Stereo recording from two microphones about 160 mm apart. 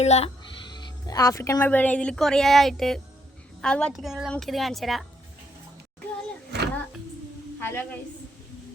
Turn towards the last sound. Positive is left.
turn(degrees=10)  # may be behind; listen again after turning